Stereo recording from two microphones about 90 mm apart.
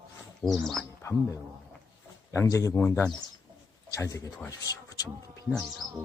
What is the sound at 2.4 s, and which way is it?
Speech, 40° left (ahead or behind).